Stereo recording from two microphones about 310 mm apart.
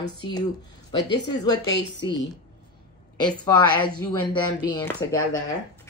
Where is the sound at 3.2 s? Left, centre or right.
Centre.